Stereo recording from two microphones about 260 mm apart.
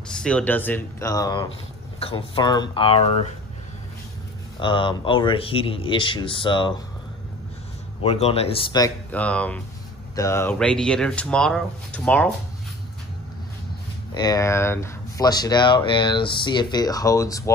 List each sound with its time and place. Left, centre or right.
0.1 s speech: centre; by 3.3 s left
4.6 s speech: centre
8.0 s speech: left; by 12.3 s centre
14.1 s speech: centre